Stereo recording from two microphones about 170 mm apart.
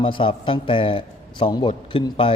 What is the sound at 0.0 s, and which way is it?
A man's voice, 30° left (ahead or behind).